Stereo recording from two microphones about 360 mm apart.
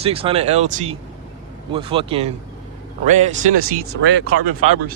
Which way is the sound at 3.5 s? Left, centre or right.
Right.